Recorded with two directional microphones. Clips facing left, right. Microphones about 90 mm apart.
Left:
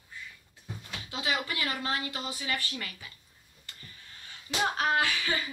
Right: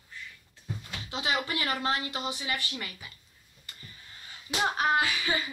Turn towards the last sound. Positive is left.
turn(degrees=-10)  # may be behind; listen again after turning